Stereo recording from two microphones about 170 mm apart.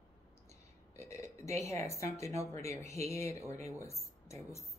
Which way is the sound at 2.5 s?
15° left (ahead or behind).